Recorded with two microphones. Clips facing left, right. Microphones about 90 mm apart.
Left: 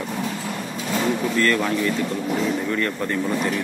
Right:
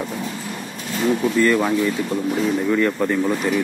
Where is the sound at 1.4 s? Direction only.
15° right (ahead or behind).